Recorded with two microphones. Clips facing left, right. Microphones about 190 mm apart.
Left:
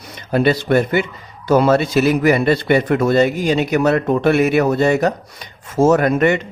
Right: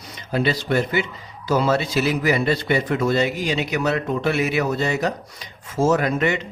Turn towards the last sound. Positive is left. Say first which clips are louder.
# left 6 dB
turn(degrees=55)  # may be behind; listen again after turning